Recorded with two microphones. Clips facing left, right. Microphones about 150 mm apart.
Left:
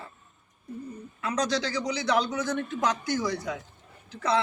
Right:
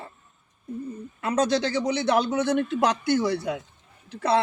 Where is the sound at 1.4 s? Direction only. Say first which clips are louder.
Right 5 dB; 55° right (ahead or behind).